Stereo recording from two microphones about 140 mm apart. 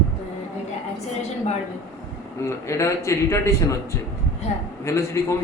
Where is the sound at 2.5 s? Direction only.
20° left (ahead or behind).